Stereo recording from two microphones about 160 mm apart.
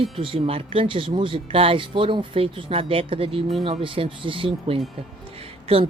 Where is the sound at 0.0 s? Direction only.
35° right (ahead or behind).